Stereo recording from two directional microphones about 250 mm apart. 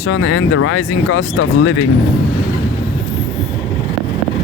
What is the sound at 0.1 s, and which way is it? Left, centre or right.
Speech, left.